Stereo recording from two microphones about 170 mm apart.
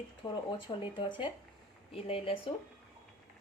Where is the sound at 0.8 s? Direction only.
30° left (ahead or behind).